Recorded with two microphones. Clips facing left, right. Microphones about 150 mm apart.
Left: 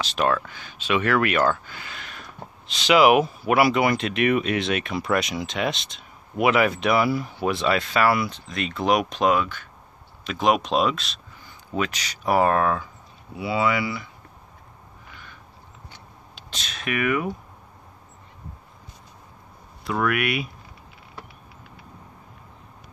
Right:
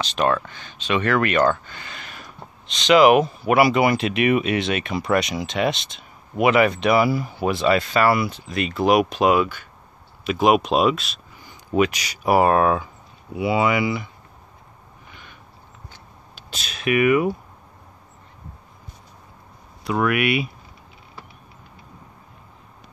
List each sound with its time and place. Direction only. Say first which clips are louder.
0.0 s speech: right 2 dB; 5° left (ahead or behind); by 14.0 s 15° right (ahead or behind)
16.4 s speech: right 7 dB; 10° right (ahead or behind)
19.8 s speech: right 3 dB; 5° right (ahead or behind)